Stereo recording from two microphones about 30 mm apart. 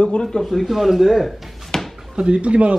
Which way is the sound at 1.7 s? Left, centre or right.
Centre.